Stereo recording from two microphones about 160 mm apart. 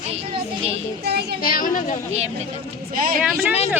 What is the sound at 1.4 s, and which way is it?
Speech, 60° left (ahead or behind).